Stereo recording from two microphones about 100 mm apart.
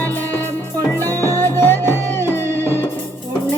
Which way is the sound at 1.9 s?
25° right (ahead or behind).